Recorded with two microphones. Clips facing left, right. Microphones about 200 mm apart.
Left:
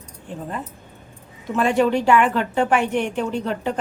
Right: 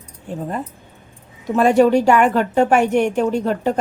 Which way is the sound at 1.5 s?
40° right (ahead or behind).